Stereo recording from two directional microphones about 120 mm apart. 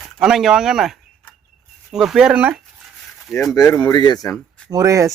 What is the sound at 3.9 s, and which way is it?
Speech, 35° left (ahead or behind).